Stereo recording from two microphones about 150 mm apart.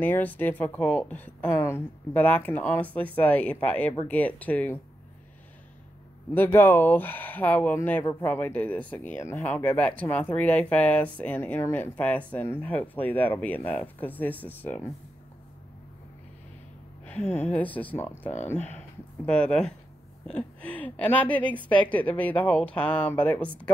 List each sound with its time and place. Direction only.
0.0 s speech: 10° left (ahead or behind)
6.3 s speech: 15° left (ahead or behind)
8.0 s speech: 25° left (ahead or behind)
8.3 s speech: 10° left (ahead or behind)
17.0 s speech: 10° left (ahead or behind)